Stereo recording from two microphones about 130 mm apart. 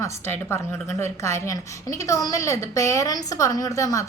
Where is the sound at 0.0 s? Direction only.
15° left (ahead or behind).